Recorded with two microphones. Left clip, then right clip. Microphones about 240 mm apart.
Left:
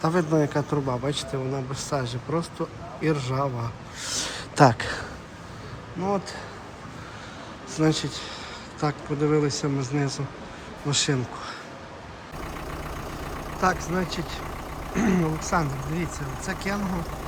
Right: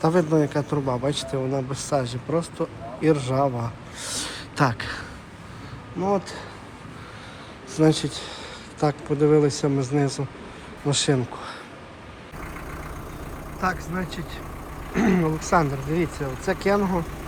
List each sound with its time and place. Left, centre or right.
0.0 s speech: centre
4.5 s speech: left
6.0 s speech: centre
7.7 s speech: centre
13.6 s speech: centre